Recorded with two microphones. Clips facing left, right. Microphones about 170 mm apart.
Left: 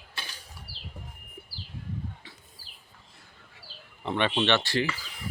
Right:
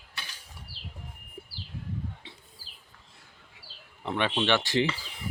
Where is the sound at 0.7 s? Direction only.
5° left (ahead or behind).